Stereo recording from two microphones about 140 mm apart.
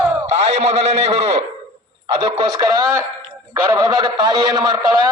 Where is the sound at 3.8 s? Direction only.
30° right (ahead or behind).